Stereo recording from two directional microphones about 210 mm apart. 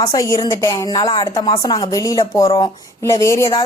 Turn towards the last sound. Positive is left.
turn(degrees=15)  # may be behind; listen again after turning